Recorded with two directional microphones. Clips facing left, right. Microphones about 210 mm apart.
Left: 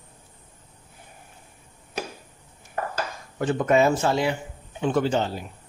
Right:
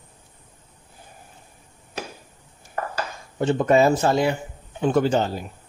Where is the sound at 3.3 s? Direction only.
30° right (ahead or behind).